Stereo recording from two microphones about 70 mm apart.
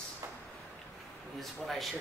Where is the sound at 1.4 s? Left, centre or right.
Centre.